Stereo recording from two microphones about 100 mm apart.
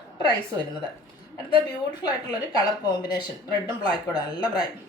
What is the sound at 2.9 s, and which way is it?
A woman's voice, 45° left (ahead or behind).